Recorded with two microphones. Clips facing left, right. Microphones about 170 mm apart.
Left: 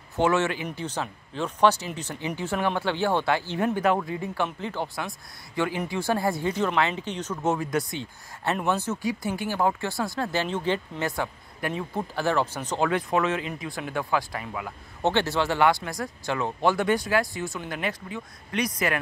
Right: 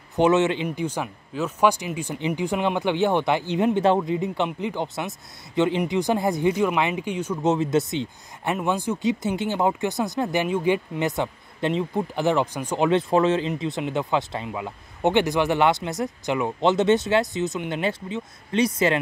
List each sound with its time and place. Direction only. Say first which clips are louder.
0.1 s speech: right 4 dB; 20° right (ahead or behind)
0.7 s speech: right 4 dB; 10° right (ahead or behind)
13.1 s speech: right 5 dB; 30° right (ahead or behind)